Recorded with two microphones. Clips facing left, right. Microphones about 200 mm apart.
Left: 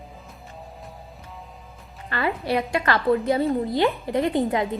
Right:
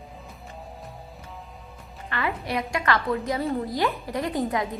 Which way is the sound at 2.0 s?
35° left (ahead or behind).